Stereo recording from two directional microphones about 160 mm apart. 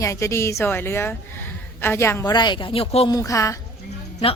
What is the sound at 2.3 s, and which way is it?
Speech, 30° left (ahead or behind).